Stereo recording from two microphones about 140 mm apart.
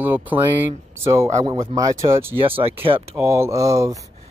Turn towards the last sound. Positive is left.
turn(degrees=-25)  # may be behind; listen again after turning